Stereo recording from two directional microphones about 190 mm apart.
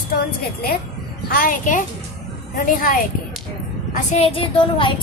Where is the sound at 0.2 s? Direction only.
55° left (ahead or behind).